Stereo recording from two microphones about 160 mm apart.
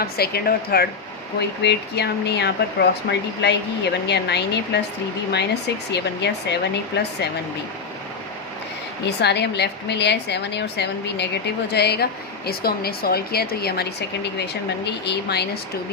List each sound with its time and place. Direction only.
0.0 s speech: 75° left (ahead or behind)
1.4 s speech: 90° left
9.0 s speech: 90° left
12.5 s speech: 75° left (ahead or behind)
14.3 s speech: 90° left